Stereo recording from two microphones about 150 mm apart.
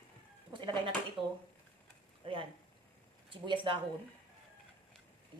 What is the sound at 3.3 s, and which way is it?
Speech, 35° right (ahead or behind).